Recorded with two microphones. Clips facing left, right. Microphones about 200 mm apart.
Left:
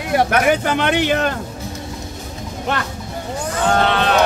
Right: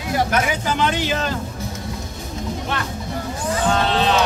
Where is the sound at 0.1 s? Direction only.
60° left (ahead or behind).